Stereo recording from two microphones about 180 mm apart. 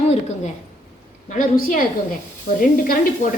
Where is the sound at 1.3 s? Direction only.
50° left (ahead or behind).